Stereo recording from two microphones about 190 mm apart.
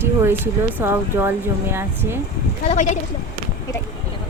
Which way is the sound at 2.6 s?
40° left (ahead or behind).